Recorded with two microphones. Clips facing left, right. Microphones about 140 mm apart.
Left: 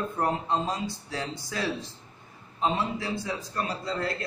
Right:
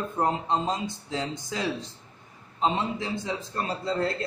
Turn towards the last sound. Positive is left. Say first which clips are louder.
# right 3 dB
turn(degrees=-25)  # may be behind; listen again after turning